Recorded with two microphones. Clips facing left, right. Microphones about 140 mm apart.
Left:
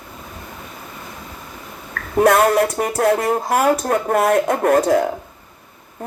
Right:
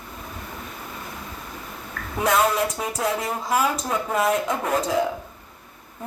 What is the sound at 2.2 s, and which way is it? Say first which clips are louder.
Speech: left 7 dB; 60° left (ahead or behind).